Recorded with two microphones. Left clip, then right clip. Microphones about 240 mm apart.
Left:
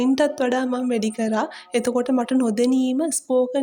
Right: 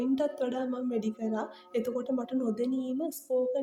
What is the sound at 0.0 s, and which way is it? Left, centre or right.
A woman's voice, left.